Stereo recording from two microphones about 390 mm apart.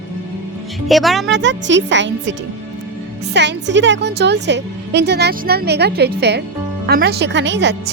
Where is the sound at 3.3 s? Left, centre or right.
Right.